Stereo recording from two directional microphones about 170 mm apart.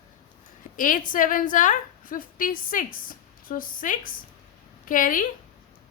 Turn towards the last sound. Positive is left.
turn(degrees=50)  # may be behind; listen again after turning